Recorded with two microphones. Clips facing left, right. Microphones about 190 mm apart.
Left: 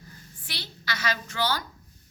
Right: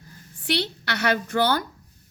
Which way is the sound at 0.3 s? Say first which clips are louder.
Right 16 dB; 70° right (ahead or behind).